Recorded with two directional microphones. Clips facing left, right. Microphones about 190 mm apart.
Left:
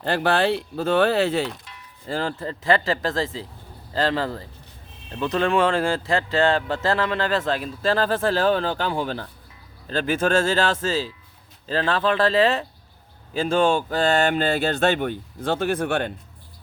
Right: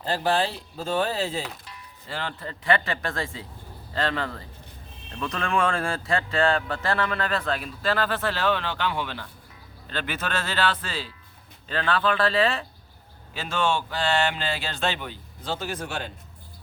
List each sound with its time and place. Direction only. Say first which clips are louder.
0.0 s speech: left 4 dB; 65° left (ahead or behind)
2.0 s speech: left 7 dB; 35° left (ahead or behind)
7.8 s speech: left 5 dB; 40° left (ahead or behind); by 16.1 s 55° left (ahead or behind)